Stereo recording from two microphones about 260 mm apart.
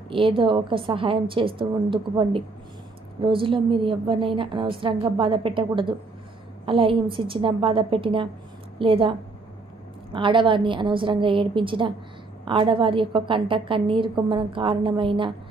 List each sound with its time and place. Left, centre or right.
0.1 s a woman's voice: centre
10.1 s a woman's voice: centre